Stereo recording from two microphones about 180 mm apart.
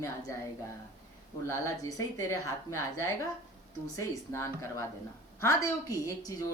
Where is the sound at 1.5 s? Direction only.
20° left (ahead or behind).